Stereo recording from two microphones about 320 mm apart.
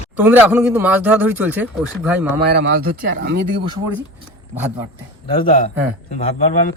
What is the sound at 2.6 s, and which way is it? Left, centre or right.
Speech, right.